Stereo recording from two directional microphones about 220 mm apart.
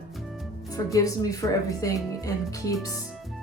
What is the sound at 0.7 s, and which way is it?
Speech, 15° left (ahead or behind).